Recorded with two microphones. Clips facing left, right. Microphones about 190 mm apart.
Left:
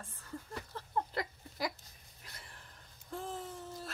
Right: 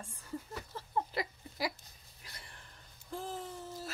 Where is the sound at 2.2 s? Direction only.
Centre (ahead or behind).